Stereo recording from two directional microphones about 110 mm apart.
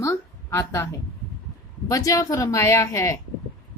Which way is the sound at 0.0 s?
25° left (ahead or behind).